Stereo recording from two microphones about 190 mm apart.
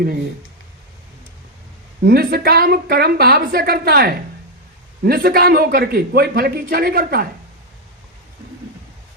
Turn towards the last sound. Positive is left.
turn(degrees=-55)  # may be behind; listen again after turning